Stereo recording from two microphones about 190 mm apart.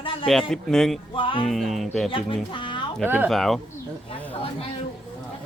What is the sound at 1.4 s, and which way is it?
Speech, centre (ahead or behind).